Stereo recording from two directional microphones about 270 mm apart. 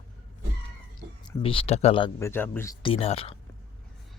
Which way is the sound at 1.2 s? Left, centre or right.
Centre.